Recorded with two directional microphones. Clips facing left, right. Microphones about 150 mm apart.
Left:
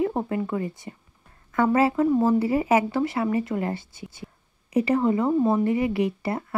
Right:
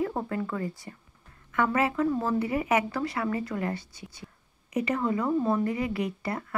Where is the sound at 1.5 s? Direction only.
35° left (ahead or behind).